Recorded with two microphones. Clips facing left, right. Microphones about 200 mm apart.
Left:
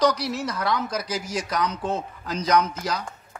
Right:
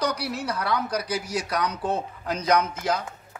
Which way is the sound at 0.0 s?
60° right (ahead or behind).